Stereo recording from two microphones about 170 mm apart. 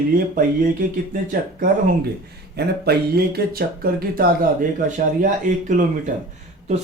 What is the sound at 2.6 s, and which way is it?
Speech, 70° right (ahead or behind).